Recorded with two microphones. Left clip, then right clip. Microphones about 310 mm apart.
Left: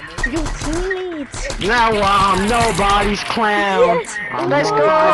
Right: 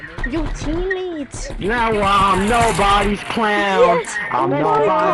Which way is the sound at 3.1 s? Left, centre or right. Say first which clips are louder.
Left 2 dB; centre.